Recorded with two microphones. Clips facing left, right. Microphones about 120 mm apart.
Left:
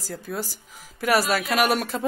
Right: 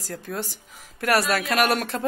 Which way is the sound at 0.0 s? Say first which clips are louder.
Even; centre (ahead or behind).